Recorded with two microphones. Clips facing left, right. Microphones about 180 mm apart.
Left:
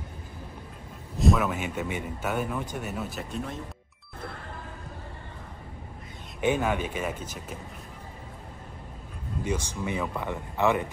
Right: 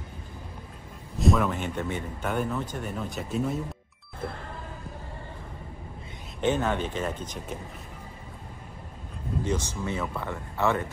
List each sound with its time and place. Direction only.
1.1 s speech: centre (ahead or behind)
6.4 s speech: 10° left (ahead or behind)
9.4 s speech: 10° left (ahead or behind)